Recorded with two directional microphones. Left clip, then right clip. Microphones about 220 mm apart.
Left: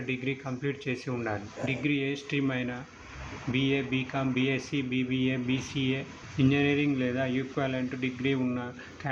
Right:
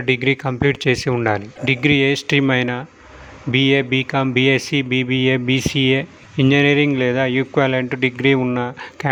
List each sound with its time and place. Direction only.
0.0 s speech: 50° right (ahead or behind)